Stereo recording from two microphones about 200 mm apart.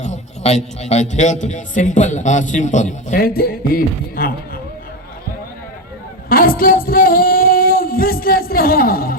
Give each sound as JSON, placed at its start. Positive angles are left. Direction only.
{"t": 0.0, "sound": "a man's voice", "side_deg": 35}
{"t": 6.2, "sound": "music", "side_deg": 45}